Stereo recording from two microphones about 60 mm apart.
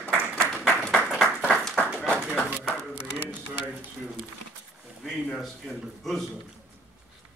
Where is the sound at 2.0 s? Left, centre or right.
Left.